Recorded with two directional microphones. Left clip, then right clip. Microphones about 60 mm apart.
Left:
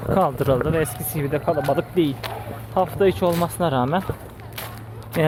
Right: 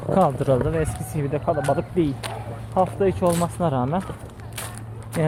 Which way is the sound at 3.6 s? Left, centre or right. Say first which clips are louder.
Left 3 dB; left.